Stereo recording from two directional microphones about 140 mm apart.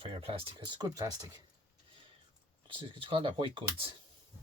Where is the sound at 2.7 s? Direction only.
40° right (ahead or behind).